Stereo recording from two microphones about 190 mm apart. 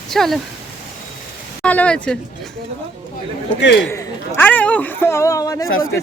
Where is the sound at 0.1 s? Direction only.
Centre (ahead or behind).